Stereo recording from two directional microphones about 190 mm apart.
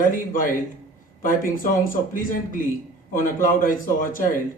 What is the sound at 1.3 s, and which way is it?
Speech, 45° left (ahead or behind).